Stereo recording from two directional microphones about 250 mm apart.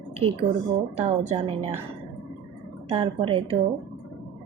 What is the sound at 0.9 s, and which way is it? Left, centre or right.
Speech, right.